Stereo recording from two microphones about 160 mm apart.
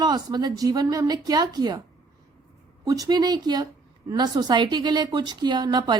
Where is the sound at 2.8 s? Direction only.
20° right (ahead or behind).